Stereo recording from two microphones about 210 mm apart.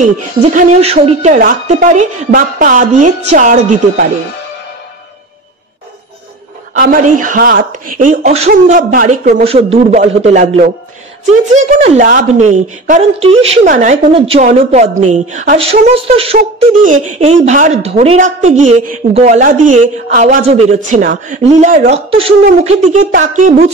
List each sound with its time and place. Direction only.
0.0 s speech: 35° right (ahead or behind)
6.7 s speech: 40° right (ahead or behind)